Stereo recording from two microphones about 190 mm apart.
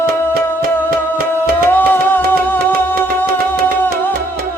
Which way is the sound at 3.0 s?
55° right (ahead or behind).